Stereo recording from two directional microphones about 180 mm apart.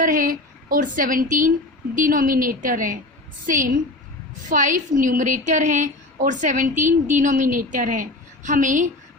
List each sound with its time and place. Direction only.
0.0 s a woman's voice: 50° right (ahead or behind)